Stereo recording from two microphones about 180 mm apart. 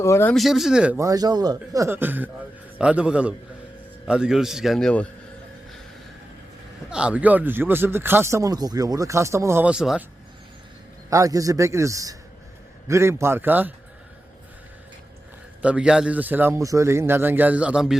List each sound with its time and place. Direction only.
0.0 s speech: 15° left (ahead or behind)
0.3 s a man's voice: centre (ahead or behind)
0.9 s a man's voice: 20° right (ahead or behind); by 5.0 s 5° left (ahead or behind)
6.9 s speech: 5° right (ahead or behind)
11.1 s speech: 20° right (ahead or behind)
15.6 s speech: 5° right (ahead or behind)